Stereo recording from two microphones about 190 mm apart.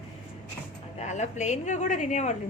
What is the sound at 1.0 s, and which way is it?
A woman's voice, 40° left (ahead or behind).